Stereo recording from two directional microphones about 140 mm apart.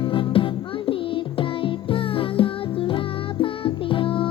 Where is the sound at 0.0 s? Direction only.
35° left (ahead or behind).